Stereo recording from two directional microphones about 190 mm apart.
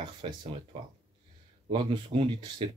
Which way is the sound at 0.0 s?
25° right (ahead or behind).